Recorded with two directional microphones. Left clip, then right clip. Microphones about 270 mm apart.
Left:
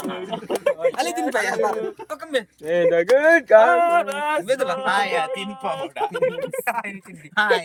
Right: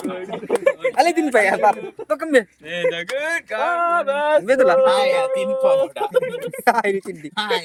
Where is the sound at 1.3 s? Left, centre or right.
Right.